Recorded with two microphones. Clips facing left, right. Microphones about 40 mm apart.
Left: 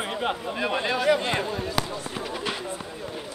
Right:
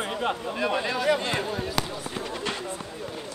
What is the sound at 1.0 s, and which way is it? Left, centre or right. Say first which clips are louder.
Speech: left 3 dB; centre.